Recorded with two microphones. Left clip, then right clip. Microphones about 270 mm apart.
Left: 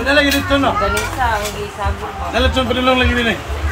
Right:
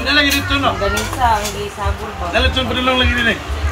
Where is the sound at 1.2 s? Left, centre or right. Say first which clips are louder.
Right 4 dB; right.